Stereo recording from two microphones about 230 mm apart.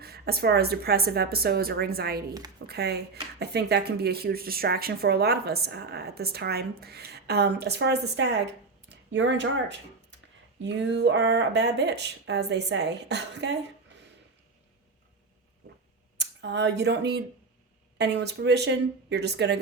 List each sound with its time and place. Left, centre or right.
0.0 s speech: right
16.1 s speech: right